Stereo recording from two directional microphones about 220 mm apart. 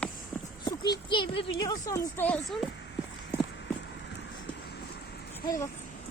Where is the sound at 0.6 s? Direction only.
20° left (ahead or behind).